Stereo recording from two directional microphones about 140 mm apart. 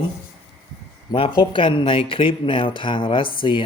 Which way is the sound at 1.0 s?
40° left (ahead or behind).